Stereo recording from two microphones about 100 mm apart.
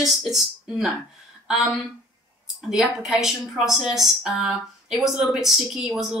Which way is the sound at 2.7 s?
5° right (ahead or behind).